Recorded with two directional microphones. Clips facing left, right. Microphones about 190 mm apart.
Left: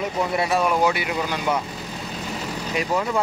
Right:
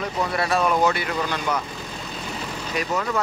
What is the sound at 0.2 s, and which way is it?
Speech, 20° left (ahead or behind).